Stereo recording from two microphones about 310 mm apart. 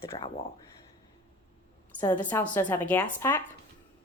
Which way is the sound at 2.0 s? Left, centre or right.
Centre.